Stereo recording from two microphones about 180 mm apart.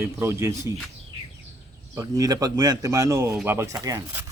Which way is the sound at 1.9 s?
20° right (ahead or behind).